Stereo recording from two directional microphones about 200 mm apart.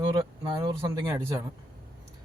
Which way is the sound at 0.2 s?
20° right (ahead or behind).